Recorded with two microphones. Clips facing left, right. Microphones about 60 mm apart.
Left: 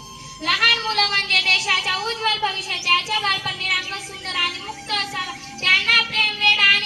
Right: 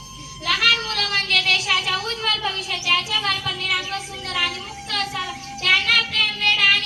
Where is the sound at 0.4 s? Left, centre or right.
Left.